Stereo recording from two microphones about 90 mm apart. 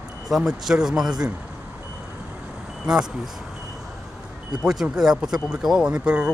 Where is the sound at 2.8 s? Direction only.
10° right (ahead or behind).